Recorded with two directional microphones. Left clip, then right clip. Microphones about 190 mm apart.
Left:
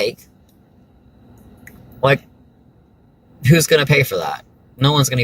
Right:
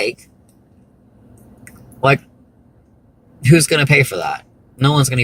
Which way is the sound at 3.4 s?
20° left (ahead or behind).